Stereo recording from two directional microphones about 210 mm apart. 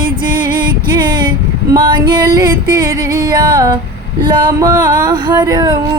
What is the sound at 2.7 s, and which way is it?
Music, 45° right (ahead or behind).